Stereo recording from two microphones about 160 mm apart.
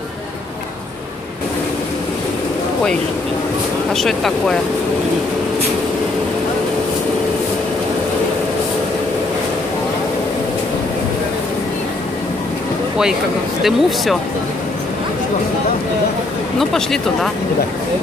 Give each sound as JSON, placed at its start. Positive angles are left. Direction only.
{"t": 3.9, "sound": "speech", "side_deg": 0}
{"t": 13.6, "sound": "speech", "side_deg": 0}
{"t": 16.5, "sound": "speech", "side_deg": 0}